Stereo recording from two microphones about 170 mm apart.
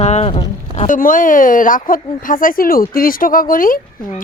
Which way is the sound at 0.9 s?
50° left (ahead or behind).